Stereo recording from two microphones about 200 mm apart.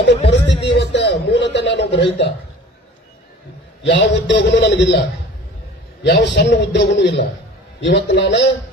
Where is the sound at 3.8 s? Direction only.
60° left (ahead or behind).